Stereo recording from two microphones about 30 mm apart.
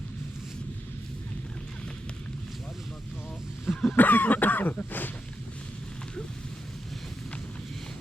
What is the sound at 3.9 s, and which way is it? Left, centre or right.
Cough, left.